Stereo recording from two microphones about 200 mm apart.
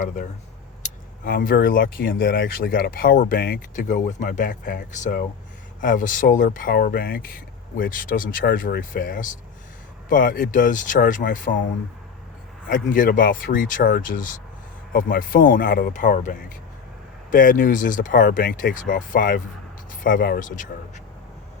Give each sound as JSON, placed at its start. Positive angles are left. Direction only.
{"t": 0.8, "sound": "speech", "side_deg": 45}
{"t": 12.6, "sound": "speech", "side_deg": 45}